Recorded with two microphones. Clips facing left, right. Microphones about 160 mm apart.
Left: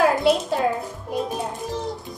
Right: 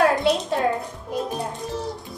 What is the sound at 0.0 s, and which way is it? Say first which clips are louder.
Music: left 1 dB; centre (ahead or behind).